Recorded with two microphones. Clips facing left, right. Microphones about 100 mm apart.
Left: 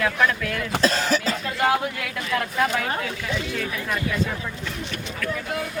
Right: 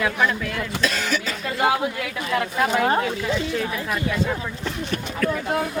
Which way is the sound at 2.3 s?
20° right (ahead or behind).